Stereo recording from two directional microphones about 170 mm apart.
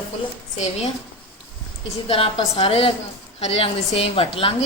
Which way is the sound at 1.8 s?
35° left (ahead or behind).